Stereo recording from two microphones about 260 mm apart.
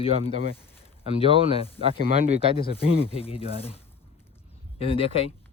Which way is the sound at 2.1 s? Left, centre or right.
Right.